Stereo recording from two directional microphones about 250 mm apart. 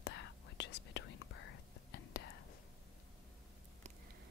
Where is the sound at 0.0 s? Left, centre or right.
Left.